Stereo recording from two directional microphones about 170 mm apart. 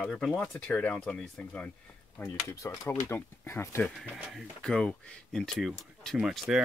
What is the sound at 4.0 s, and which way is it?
Speech, centre (ahead or behind).